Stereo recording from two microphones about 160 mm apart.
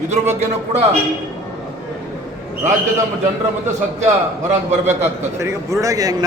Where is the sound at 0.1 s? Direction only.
45° right (ahead or behind).